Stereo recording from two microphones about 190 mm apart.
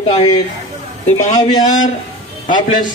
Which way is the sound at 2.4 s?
40° left (ahead or behind).